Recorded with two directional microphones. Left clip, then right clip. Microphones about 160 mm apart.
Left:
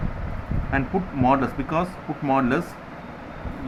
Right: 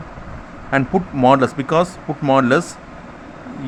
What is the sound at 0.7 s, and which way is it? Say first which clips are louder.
Speech: right 7 dB; 55° right (ahead or behind).